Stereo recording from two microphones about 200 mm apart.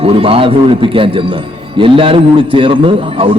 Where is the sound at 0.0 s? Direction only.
30° right (ahead or behind).